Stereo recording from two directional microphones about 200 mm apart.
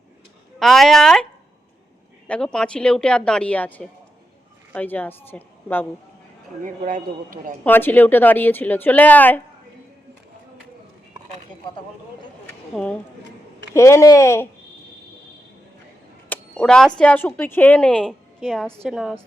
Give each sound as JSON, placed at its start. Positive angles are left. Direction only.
{"t": 0.6, "sound": "a woman's voice", "side_deg": 0}
{"t": 6.6, "sound": "speech", "side_deg": -40}
{"t": 7.6, "sound": "a woman's voice", "side_deg": 10}
{"t": 12.7, "sound": "a woman's voice", "side_deg": 5}
{"t": 16.3, "sound": "a sound", "side_deg": 5}
{"t": 17.0, "sound": "a woman's voice", "side_deg": 10}